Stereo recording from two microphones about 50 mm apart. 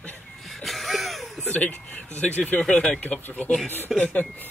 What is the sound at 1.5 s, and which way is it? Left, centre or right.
Speech, left.